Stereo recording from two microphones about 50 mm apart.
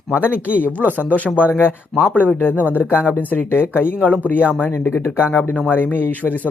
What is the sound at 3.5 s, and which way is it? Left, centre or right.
Speech, left.